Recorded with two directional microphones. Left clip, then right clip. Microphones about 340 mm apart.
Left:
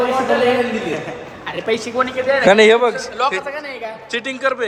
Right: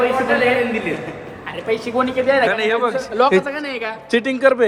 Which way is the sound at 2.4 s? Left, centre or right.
Centre.